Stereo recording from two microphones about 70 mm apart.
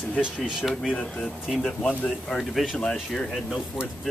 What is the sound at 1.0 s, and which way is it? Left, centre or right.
Speech, centre.